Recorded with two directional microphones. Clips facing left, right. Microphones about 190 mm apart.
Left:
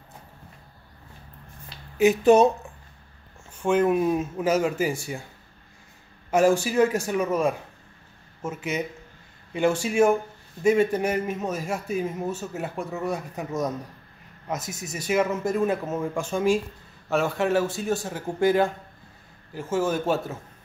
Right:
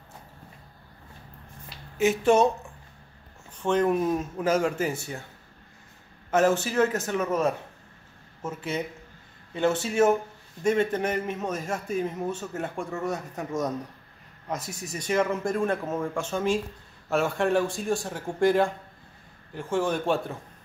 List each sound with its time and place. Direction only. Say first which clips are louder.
2.0 s speech: left 4 dB; 15° left (ahead or behind)
3.6 s a man's voice: left 2 dB; 10° left (ahead or behind)
6.3 s a man's voice: left 2 dB; 10° left (ahead or behind)
14.7 s a man's voice: left 2 dB; 5° left (ahead or behind)